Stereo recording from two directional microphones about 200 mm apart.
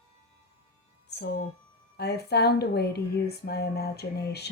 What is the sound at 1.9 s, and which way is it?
A woman's voice, 55° left (ahead or behind).